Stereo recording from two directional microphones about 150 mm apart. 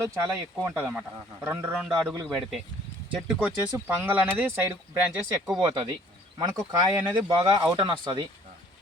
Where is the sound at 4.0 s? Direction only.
10° right (ahead or behind).